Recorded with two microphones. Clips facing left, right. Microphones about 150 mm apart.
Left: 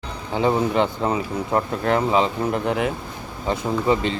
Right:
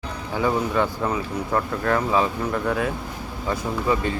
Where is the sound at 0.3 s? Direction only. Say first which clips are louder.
Left 3 dB; 25° left (ahead or behind).